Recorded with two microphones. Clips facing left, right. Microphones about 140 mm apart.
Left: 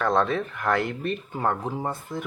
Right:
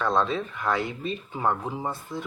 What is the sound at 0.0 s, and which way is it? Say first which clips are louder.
Speech: left 2 dB; 60° left (ahead or behind).